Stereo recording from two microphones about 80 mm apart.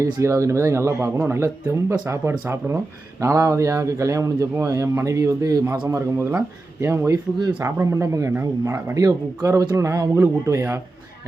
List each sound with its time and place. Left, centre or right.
0.0 s speech: right